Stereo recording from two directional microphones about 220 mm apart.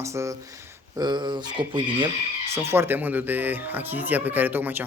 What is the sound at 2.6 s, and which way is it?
Speech, 10° right (ahead or behind).